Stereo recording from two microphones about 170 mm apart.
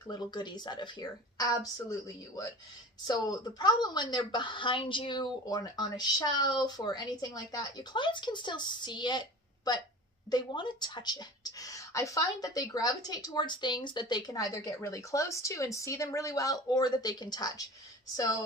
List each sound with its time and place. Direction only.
0.1 s speech: 25° left (ahead or behind)